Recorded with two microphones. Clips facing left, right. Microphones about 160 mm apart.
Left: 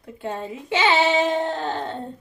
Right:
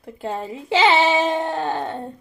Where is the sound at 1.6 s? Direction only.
20° right (ahead or behind).